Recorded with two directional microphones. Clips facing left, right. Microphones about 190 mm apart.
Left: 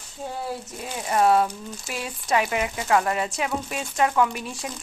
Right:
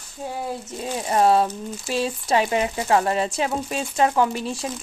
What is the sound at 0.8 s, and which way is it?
A woman's voice, 30° right (ahead or behind).